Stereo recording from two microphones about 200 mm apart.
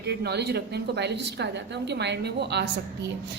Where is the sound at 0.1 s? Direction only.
55° right (ahead or behind).